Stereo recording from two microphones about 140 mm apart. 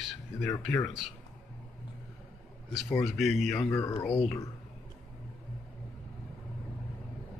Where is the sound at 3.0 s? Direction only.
Centre (ahead or behind).